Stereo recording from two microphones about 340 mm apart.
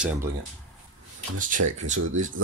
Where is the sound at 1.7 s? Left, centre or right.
Right.